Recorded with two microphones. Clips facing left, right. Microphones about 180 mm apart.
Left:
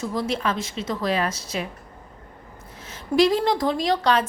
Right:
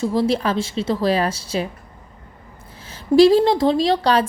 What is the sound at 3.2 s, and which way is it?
A woman's voice, 30° right (ahead or behind).